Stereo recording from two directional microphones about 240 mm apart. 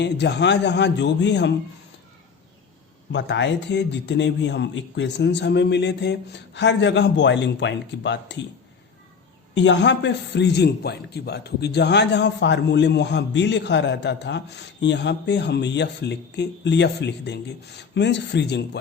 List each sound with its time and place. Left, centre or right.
0.0 s a man's voice: left
3.1 s a man's voice: left
9.6 s a man's voice: left